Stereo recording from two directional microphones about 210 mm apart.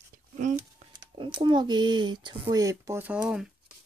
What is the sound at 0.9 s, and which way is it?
Speech, 25° right (ahead or behind).